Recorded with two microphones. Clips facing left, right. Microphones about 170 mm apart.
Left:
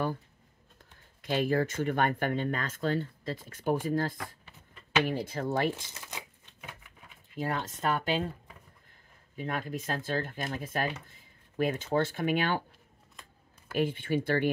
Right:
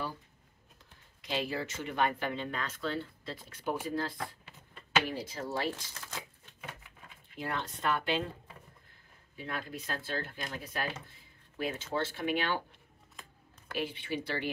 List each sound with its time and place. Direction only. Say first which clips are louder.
1.2 s speech: left 7 dB; 50° left (ahead or behind)
5.8 s speech: even; 20° left (ahead or behind)
7.3 s speech: left 4 dB; 45° left (ahead or behind)
9.4 s speech: left 5 dB; 45° left (ahead or behind)
13.7 s speech: left 7 dB; 50° left (ahead or behind)